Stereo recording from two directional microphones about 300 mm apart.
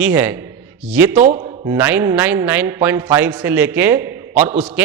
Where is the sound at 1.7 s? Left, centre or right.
Centre.